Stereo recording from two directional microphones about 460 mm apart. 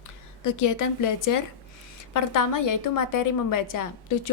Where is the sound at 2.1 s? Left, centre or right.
Left.